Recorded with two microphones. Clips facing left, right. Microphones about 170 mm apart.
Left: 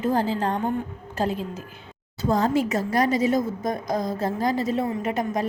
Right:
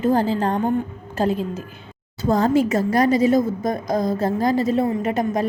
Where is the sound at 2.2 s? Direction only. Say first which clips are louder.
Right 4 dB; 40° right (ahead or behind).